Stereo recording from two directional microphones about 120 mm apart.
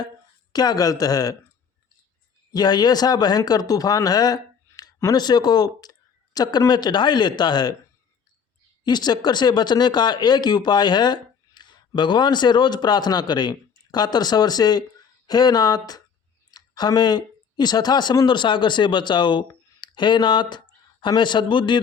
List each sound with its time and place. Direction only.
0.5 s speech: 35° left (ahead or behind)
2.5 s speech: 35° left (ahead or behind)
8.8 s speech: 35° left (ahead or behind)